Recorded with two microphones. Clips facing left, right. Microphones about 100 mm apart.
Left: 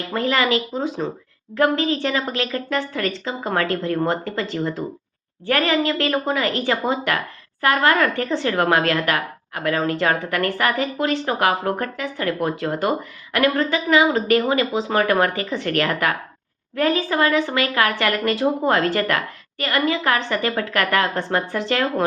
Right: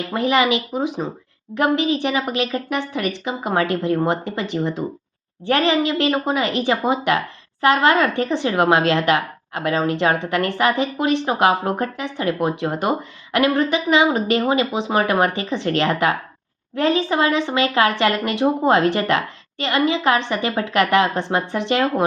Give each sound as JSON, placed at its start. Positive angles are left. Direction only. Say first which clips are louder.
{"t": 0.1, "sound": "speech", "louder": "right 2 dB", "side_deg": -20}